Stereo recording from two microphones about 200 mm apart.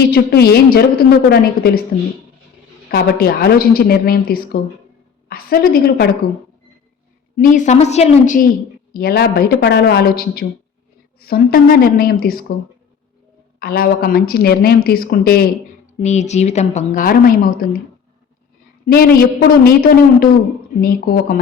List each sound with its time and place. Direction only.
0.1 s speech: 50° left (ahead or behind)
2.9 s speech: 50° left (ahead or behind)
7.3 s a woman's voice: 40° left (ahead or behind)
8.9 s speech: 50° left (ahead or behind)
13.6 s speech: 50° left (ahead or behind)
16.0 s a woman's voice: 35° left (ahead or behind)
18.9 s speech: 50° left (ahead or behind)